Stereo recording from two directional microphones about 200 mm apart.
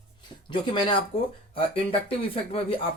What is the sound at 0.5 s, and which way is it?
Speech, 25° left (ahead or behind).